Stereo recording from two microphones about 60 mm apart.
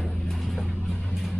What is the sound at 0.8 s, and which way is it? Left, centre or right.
Music, centre.